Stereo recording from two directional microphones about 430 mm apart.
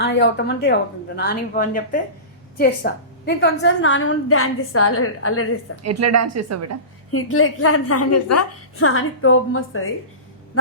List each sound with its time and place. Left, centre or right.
0.0 s a woman's voice: left
5.8 s a woman's voice: right
7.1 s a woman's voice: left